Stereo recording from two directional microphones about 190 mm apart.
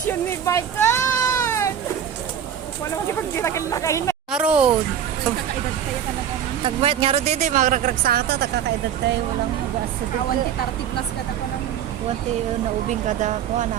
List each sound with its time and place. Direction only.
0.1 s sheep: 15° left (ahead or behind)
3.3 s speech: 15° left (ahead or behind)
4.3 s speech: 5° right (ahead or behind)
6.8 s speech: 30° right (ahead or behind); by 8.6 s 55° right (ahead or behind)
12.9 s speech: 40° right (ahead or behind)